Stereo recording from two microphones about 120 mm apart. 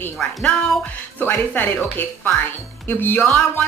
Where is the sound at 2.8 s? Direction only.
15° left (ahead or behind).